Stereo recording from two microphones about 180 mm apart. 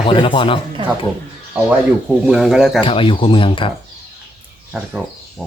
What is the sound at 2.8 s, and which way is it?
Speech, 30° left (ahead or behind).